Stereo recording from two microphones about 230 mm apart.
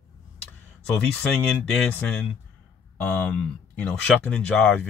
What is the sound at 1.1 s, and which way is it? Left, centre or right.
Speech, centre.